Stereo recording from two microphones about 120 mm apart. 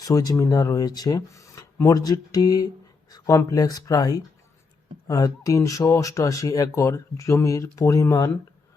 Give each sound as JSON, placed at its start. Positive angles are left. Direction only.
{"t": 0.0, "sound": "speech", "side_deg": 30}